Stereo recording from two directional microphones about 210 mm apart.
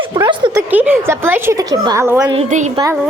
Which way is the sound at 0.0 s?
20° right (ahead or behind).